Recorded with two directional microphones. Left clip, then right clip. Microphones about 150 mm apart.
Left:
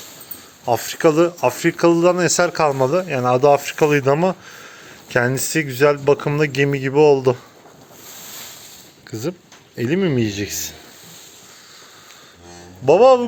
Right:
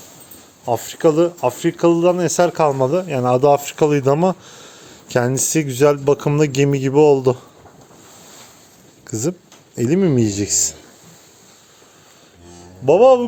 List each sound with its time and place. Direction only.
0.6 s speech: 10° right (ahead or behind); by 7.3 s 45° right (ahead or behind)
9.1 s speech: 50° right (ahead or behind)
12.8 s speech: 20° right (ahead or behind)